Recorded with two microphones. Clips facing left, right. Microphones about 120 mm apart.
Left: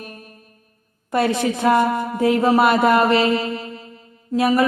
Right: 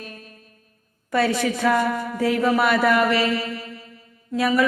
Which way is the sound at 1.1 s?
20° left (ahead or behind).